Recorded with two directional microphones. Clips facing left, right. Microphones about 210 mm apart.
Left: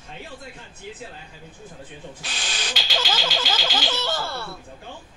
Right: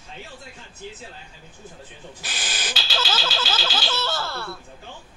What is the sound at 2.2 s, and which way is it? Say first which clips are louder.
Owl: right 2 dB; 5° right (ahead or behind).